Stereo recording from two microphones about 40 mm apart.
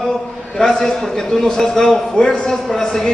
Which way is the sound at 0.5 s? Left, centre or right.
Centre.